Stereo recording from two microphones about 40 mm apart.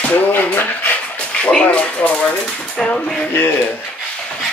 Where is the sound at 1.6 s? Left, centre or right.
Left.